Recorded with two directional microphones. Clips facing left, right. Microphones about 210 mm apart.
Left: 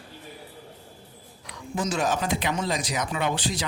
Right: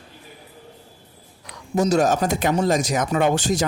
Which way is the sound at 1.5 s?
40° right (ahead or behind).